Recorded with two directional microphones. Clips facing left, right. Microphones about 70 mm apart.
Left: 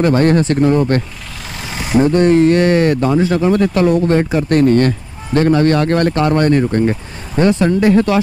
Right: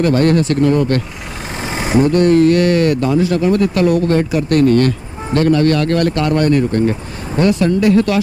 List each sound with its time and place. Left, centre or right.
0.0 s speech: left
1.6 s vehicle: right
2.1 s speech: left